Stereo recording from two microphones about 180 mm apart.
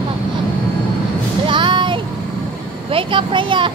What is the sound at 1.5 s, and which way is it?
Music, 25° right (ahead or behind).